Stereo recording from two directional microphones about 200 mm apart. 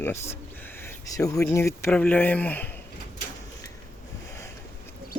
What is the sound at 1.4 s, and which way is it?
Speech, 15° left (ahead or behind).